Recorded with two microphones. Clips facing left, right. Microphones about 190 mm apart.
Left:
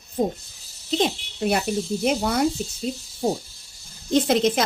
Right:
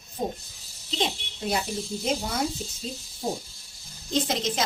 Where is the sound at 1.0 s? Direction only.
65° left (ahead or behind).